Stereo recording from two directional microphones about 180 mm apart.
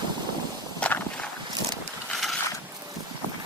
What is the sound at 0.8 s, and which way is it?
Walk, 5° left (ahead or behind).